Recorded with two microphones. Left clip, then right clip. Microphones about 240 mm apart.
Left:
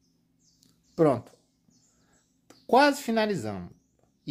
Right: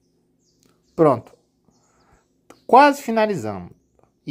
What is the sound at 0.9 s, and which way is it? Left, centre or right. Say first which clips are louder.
Speech: right 7 dB; centre.